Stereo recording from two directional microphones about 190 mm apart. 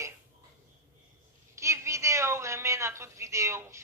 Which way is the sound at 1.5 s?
15° right (ahead or behind).